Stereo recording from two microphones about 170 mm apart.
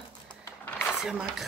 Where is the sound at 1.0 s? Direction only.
5° right (ahead or behind).